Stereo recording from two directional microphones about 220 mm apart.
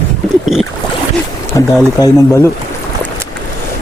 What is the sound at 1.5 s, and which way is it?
Speech, 15° left (ahead or behind).